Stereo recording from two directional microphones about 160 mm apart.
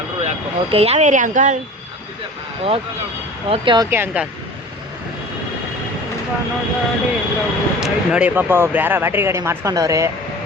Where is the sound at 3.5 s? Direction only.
30° right (ahead or behind).